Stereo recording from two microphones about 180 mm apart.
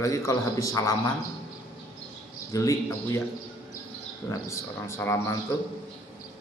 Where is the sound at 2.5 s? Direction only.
20° left (ahead or behind).